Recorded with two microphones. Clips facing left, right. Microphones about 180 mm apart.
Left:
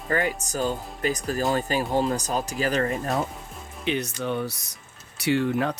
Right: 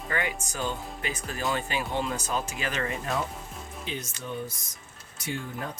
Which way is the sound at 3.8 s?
70° left (ahead or behind).